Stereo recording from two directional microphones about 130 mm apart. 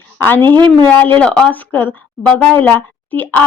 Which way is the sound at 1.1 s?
10° left (ahead or behind).